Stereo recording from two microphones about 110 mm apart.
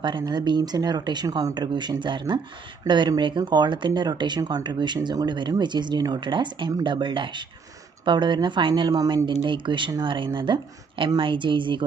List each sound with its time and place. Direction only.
0.0 s a woman's voice: 45° right (ahead or behind)